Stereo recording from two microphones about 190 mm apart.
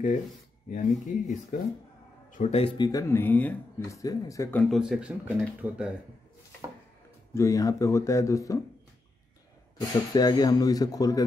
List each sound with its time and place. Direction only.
0.7 s speech: 40° left (ahead or behind); by 4.7 s 10° left (ahead or behind)
4.7 s speech: 5° right (ahead or behind)
7.3 s speech: 15° left (ahead or behind)
9.8 s speech: 20° left (ahead or behind)